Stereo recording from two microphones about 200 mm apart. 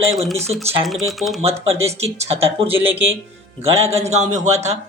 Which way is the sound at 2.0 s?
30° right (ahead or behind).